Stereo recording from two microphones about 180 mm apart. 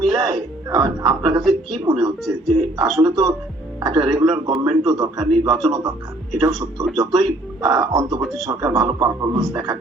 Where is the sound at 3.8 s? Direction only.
20° right (ahead or behind).